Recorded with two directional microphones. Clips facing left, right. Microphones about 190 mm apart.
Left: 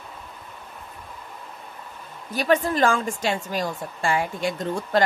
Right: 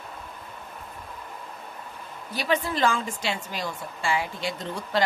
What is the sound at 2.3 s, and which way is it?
A woman's voice, 45° left (ahead or behind).